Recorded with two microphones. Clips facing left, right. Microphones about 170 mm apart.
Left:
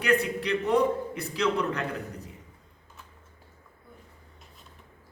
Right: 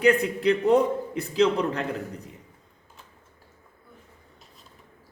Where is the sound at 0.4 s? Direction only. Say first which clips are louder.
Right 7 dB; 35° right (ahead or behind).